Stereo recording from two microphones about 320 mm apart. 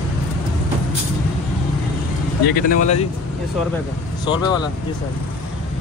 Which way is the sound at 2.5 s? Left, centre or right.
Left.